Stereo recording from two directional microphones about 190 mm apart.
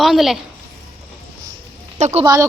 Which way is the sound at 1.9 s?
35° right (ahead or behind).